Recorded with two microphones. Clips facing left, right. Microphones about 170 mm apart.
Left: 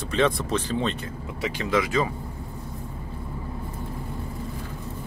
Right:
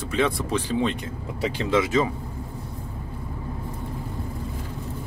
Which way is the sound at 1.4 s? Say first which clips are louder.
Right 2 dB; 30° right (ahead or behind).